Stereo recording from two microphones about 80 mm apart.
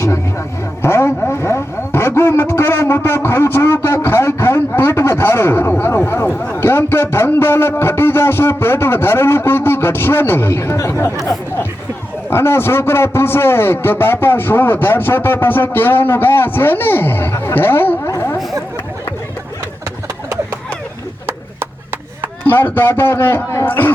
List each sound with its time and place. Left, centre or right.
0.8 s vehicle: left
3.2 s a sound: left
12.3 s a man's voice: left
22.4 s a man's voice: left